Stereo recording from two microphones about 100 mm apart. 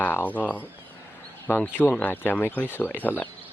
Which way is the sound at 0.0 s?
15° left (ahead or behind).